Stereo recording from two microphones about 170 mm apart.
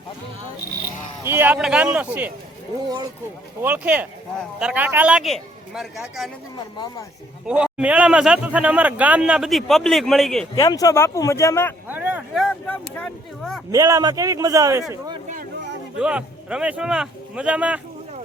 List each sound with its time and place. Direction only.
1.2 s a man's voice: 15° right (ahead or behind)
3.6 s a man's voice: 10° right (ahead or behind)
7.4 s a man's voice: 5° right (ahead or behind)
10.5 s speech: 25° left (ahead or behind)
11.9 s a sound: 10° right (ahead or behind)
12.6 s speech: 10° left (ahead or behind)
13.7 s a man's voice: 20° right (ahead or behind)
16.0 s a man's voice: 5° right (ahead or behind)